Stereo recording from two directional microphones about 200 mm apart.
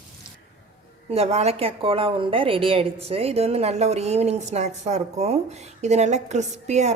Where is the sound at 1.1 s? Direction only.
30° right (ahead or behind).